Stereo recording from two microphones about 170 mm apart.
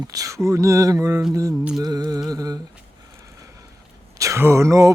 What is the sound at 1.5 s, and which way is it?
Music, 5° right (ahead or behind).